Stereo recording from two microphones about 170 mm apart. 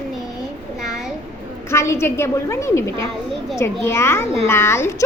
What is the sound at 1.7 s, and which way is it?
A woman's voice, 15° left (ahead or behind).